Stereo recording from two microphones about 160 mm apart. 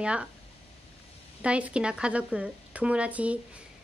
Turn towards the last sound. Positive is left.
turn(degrees=-10)  # may be behind; listen again after turning